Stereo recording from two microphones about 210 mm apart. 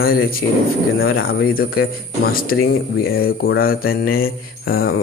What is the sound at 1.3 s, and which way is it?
Mantra, 45° left (ahead or behind).